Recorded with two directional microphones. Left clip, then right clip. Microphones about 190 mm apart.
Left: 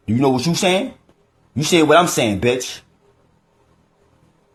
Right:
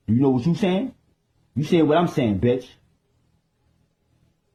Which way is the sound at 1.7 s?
20° left (ahead or behind).